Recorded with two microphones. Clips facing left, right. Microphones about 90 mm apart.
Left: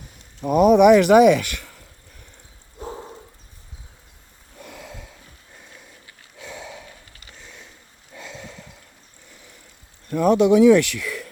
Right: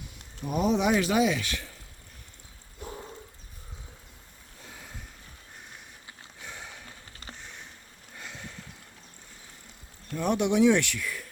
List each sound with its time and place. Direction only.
0.4 s speech: 65° left (ahead or behind)
2.8 s dog: 25° left (ahead or behind)
4.6 s snort: 85° left
7.1 s sniff: 35° right (ahead or behind)
10.1 s speech: 90° left